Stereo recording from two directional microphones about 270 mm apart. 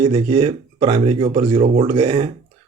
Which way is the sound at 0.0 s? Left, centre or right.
Centre.